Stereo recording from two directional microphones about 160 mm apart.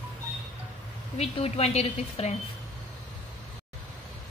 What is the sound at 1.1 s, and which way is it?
A woman's voice, 40° left (ahead or behind).